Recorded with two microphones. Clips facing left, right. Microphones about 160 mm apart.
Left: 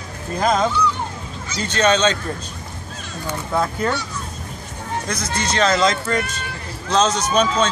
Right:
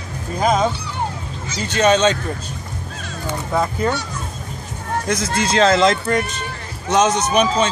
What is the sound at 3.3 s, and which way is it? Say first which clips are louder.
Speech: right 1 dB; 15° right (ahead or behind).